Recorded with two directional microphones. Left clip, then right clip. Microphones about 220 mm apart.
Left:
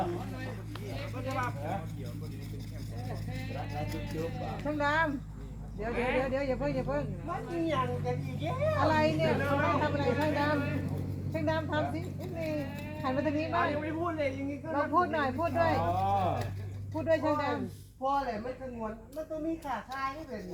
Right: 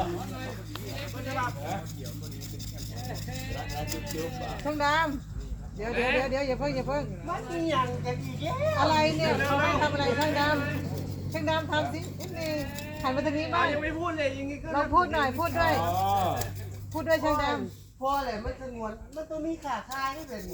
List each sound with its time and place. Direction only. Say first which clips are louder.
3.1 s music: right 3 dB; 50° right (ahead or behind)
5.9 s speech: right 5 dB; 30° right (ahead or behind)
6.1 s speech: right 3 dB; 50° right (ahead or behind)
14.0 s speech: right 3 dB; 25° right (ahead or behind)
14.7 s speech: right 4 dB; 45° right (ahead or behind)